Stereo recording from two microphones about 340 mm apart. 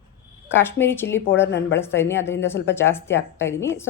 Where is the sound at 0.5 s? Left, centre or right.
Centre.